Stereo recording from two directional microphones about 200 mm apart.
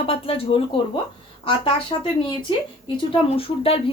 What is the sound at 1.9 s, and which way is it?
Speech, 25° left (ahead or behind).